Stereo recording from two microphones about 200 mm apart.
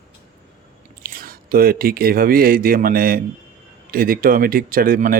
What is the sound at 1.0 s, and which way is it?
Speech, 45° right (ahead or behind).